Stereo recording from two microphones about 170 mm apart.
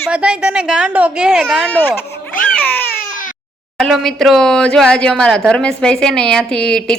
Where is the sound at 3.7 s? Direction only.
Centre (ahead or behind).